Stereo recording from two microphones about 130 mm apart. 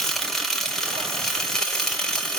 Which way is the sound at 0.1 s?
Centre (ahead or behind).